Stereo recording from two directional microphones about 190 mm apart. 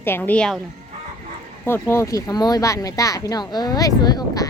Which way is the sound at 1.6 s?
10° left (ahead or behind).